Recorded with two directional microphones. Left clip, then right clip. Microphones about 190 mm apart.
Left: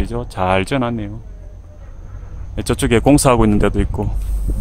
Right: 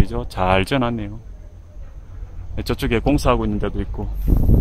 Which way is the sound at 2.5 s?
5° left (ahead or behind).